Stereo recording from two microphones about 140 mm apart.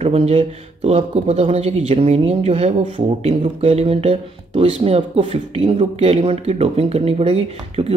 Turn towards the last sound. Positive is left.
turn(degrees=-45)  # may be behind; listen again after turning